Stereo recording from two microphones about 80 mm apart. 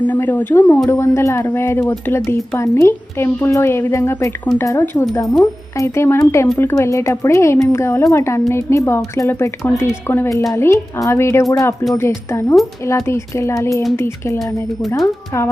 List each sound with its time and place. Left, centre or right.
0.1 s speech: left
0.9 s a woman's voice: left
4.5 s speech: centre
4.9 s a woman's voice: left
14.8 s speech: left